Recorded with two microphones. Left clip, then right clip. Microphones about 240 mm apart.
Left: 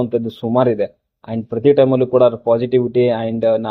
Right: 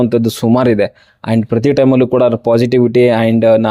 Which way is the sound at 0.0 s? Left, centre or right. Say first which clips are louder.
Right 6 dB; right.